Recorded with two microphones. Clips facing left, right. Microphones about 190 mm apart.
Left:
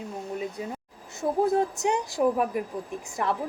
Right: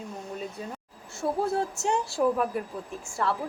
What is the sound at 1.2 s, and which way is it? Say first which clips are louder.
A woman's voice: left 4 dB; 20° left (ahead or behind).